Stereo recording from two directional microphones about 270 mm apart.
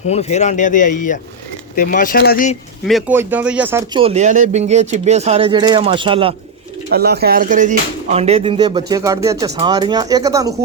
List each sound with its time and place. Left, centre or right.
0.1 s speech: left
2.8 s speech: centre
4.0 s speech: right
6.9 s speech: right; by 10.5 s centre